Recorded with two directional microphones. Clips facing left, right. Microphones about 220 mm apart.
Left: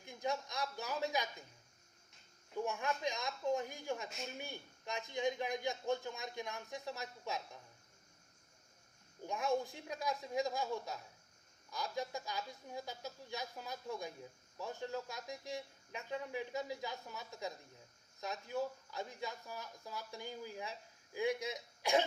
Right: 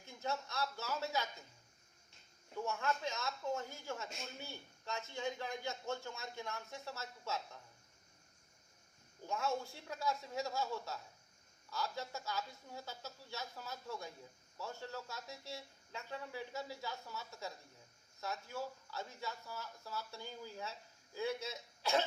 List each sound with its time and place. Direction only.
0.0 s speech: 15° left (ahead or behind)
2.6 s speech: 15° left (ahead or behind)
9.2 s speech: 15° left (ahead or behind)